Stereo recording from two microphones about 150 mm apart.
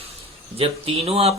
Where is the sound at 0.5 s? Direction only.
40° right (ahead or behind).